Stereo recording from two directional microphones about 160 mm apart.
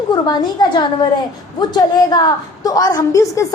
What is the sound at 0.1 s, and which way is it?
A woman's voice, 25° left (ahead or behind).